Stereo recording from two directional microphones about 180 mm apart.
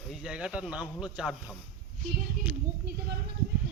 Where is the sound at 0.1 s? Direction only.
5° right (ahead or behind).